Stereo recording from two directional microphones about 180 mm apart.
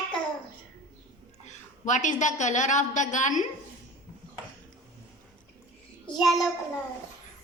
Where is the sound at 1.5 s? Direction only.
45° left (ahead or behind).